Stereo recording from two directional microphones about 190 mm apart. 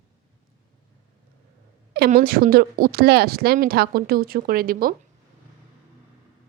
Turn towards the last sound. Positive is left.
turn(degrees=-50)  # may be behind; listen again after turning